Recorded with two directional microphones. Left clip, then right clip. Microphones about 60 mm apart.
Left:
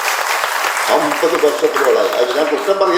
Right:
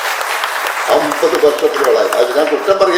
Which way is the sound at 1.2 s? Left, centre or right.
Right.